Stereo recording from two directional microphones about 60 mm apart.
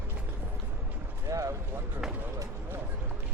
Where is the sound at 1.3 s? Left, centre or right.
Right.